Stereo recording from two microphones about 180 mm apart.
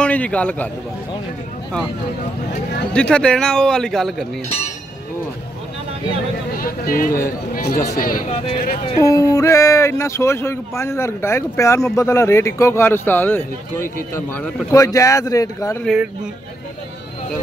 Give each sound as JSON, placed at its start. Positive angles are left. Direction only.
{"t": 0.0, "sound": "a man's voice", "side_deg": 5}
{"t": 2.9, "sound": "speech", "side_deg": 5}
{"t": 6.5, "sound": "speech", "side_deg": 55}
{"t": 8.3, "sound": "speech", "side_deg": 35}
{"t": 9.0, "sound": "speech", "side_deg": 20}
{"t": 15.8, "sound": "speech", "side_deg": 0}